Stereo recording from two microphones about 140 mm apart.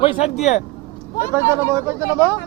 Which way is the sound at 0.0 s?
45° left (ahead or behind).